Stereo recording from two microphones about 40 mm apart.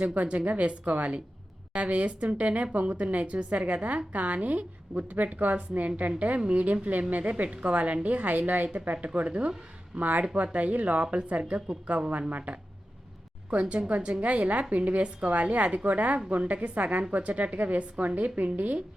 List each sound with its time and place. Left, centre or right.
0.0 s a woman's voice: right